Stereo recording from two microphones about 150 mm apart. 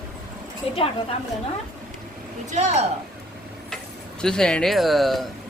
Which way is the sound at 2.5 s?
50° right (ahead or behind).